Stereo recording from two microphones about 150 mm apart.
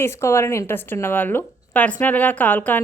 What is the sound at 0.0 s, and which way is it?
A woman's voice, 20° left (ahead or behind).